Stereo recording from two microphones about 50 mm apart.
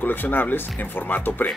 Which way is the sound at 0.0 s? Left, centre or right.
Left.